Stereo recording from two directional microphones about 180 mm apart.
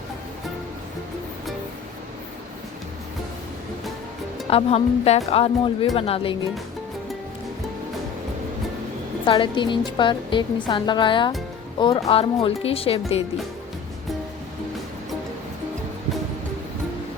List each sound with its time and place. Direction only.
4.4 s a woman's voice: 35° left (ahead or behind)
9.2 s a woman's voice: 30° left (ahead or behind)